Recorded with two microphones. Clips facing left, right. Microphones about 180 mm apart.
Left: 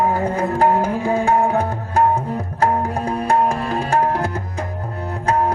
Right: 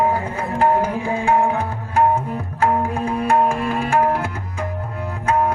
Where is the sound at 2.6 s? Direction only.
40° left (ahead or behind).